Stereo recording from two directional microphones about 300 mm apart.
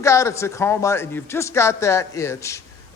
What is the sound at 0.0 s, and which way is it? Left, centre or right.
A man's voice, centre.